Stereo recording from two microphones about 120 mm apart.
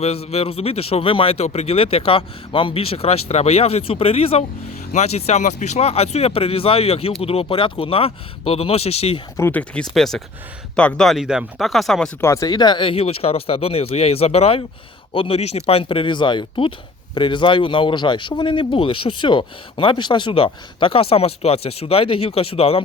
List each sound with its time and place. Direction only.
0.0 s speech: 60° left (ahead or behind)
9.4 s speech: 15° left (ahead or behind)
12.2 s speech: 25° left (ahead or behind); by 22.8 s 55° left (ahead or behind)